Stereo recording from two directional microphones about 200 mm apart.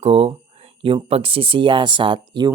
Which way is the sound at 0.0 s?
30° right (ahead or behind).